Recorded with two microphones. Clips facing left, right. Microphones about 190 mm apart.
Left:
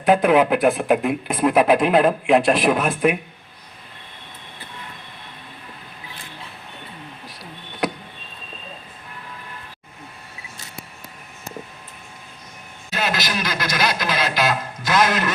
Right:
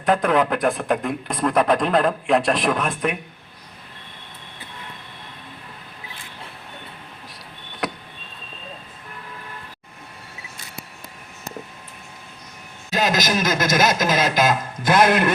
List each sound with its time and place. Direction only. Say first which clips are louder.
0.0 s speech: left 3 dB; 5° left (ahead or behind)
7.8 s a sound: left 4 dB; centre (ahead or behind)
12.9 s a man's voice: right 4 dB; 40° right (ahead or behind)